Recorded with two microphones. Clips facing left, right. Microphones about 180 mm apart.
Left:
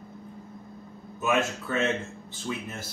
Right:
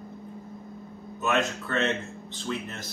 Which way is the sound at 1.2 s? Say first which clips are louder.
Even; 10° left (ahead or behind).